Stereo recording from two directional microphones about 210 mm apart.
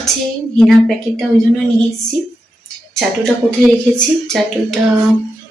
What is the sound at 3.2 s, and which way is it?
A woman's voice, 5° left (ahead or behind).